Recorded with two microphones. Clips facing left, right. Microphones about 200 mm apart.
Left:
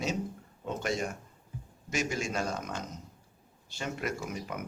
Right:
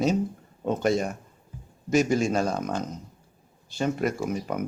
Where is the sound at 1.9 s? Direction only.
35° right (ahead or behind).